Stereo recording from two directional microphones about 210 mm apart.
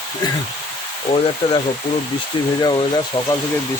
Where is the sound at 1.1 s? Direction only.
20° left (ahead or behind).